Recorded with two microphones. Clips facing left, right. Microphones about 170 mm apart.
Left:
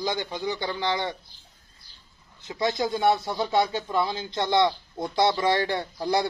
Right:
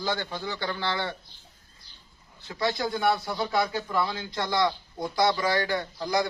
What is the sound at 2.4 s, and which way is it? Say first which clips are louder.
Speech: left 2 dB; 20° left (ahead or behind).